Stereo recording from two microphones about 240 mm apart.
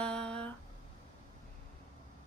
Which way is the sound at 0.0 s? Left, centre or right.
Centre.